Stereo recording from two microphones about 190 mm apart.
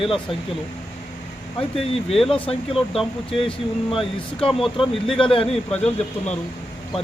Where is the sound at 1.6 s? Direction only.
30° left (ahead or behind).